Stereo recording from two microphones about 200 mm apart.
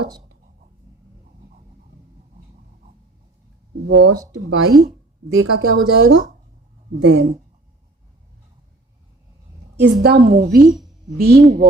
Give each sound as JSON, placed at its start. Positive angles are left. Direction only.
{"t": 3.8, "sound": "speech", "side_deg": -70}
{"t": 4.4, "sound": "speech", "side_deg": -85}
{"t": 7.0, "sound": "speech", "side_deg": -75}
{"t": 9.8, "sound": "a woman's voice", "side_deg": -55}
{"t": 10.6, "sound": "a woman's voice", "side_deg": 0}
{"t": 11.2, "sound": "a woman's voice", "side_deg": -50}